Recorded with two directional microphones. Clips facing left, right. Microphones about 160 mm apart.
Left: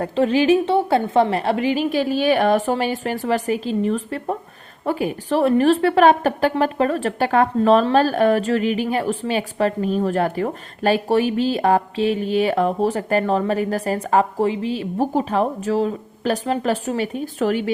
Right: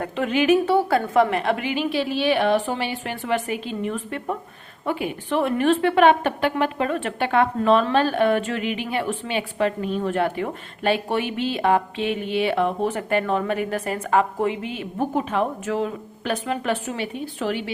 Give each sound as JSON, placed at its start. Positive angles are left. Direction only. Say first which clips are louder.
{"t": 0.0, "sound": "a woman's voice", "louder": "left 4 dB", "side_deg": 35}